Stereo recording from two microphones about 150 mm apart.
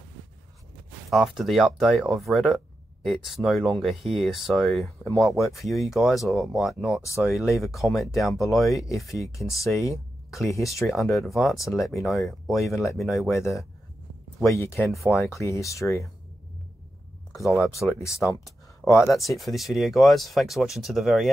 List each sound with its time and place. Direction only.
1.1 s speech: centre (ahead or behind)
8.7 s speech: 20° left (ahead or behind)
10.9 s speech: centre (ahead or behind)
14.5 s speech: 15° left (ahead or behind)
17.4 s speech: centre (ahead or behind)
18.0 s speech: 20° left (ahead or behind)
19.1 s speech: centre (ahead or behind)